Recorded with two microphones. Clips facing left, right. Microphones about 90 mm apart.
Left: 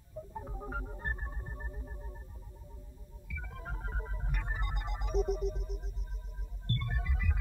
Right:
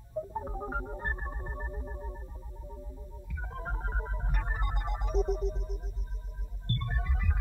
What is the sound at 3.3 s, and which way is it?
Music, 40° right (ahead or behind).